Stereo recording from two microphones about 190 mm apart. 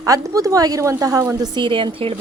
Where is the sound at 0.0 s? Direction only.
15° right (ahead or behind).